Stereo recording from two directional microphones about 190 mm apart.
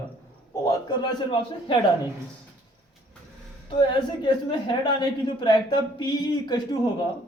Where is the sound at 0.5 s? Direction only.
20° left (ahead or behind).